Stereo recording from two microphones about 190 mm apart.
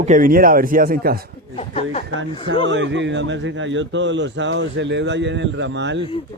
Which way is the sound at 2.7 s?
70° right (ahead or behind).